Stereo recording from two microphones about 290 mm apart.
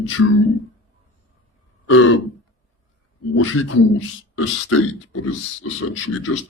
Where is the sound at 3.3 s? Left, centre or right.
Left.